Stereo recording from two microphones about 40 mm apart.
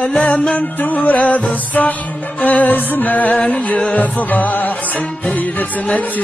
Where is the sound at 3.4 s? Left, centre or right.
Left.